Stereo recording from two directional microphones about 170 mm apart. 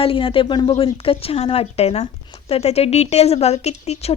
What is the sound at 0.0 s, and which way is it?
A woman's voice, 30° left (ahead or behind).